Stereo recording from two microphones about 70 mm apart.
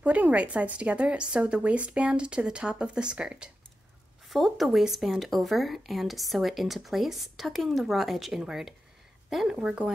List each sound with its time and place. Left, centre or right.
0.0 s speech: centre
4.3 s speech: centre